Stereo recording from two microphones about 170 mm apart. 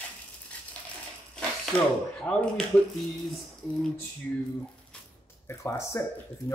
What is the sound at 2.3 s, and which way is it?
Speech, 5° left (ahead or behind).